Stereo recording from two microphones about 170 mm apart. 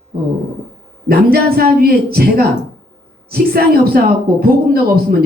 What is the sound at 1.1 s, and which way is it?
Speech, 65° right (ahead or behind).